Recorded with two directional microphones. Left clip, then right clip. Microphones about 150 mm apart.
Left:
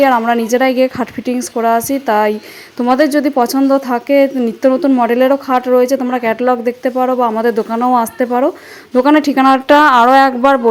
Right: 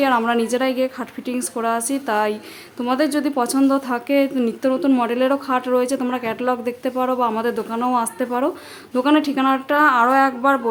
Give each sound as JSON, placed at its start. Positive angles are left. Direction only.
{"t": 0.2, "sound": "a woman's voice", "side_deg": 30}